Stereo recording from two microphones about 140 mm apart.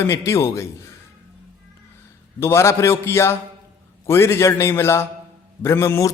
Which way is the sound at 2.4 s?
20° left (ahead or behind).